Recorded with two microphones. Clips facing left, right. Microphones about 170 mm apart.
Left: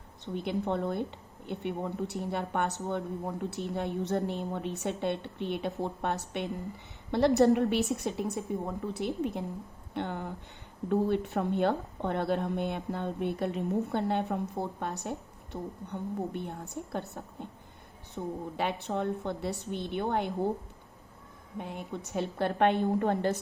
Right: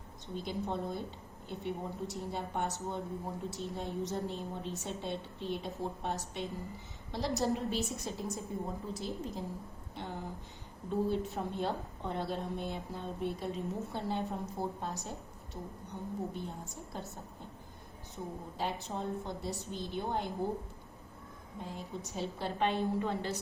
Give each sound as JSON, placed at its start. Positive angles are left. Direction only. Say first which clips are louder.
{"t": 0.3, "sound": "a woman's voice", "louder": "left 6 dB", "side_deg": 65}
{"t": 21.6, "sound": "a woman's voice", "louder": "left 4 dB", "side_deg": 65}